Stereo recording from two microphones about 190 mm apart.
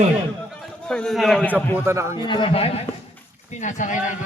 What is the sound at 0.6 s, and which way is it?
Speech, 5° left (ahead or behind).